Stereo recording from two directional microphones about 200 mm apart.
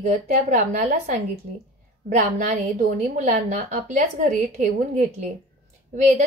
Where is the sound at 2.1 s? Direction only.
35° right (ahead or behind).